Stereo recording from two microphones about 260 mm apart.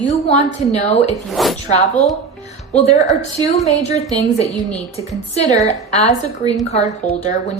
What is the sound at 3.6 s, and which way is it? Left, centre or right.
Speech, left.